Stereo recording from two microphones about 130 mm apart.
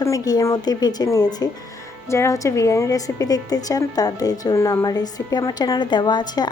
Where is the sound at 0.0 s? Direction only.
25° left (ahead or behind).